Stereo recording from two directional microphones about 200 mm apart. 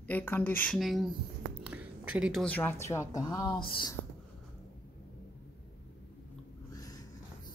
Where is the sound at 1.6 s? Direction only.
5° right (ahead or behind).